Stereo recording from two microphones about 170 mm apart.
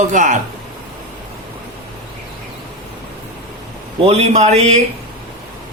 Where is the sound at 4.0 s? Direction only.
40° right (ahead or behind).